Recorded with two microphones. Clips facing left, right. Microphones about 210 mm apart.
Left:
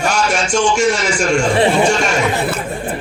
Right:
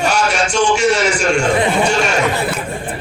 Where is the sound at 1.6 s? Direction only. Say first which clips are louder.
Left 3 dB; 30° left (ahead or behind).